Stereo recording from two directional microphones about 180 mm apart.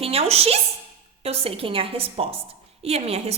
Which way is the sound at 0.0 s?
35° right (ahead or behind).